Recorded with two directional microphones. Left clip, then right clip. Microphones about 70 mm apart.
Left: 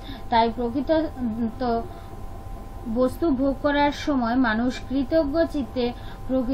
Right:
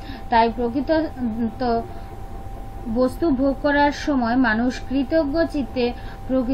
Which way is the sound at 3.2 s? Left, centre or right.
Left.